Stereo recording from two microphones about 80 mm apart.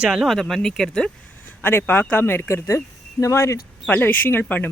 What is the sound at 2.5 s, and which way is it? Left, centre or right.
Speech, left.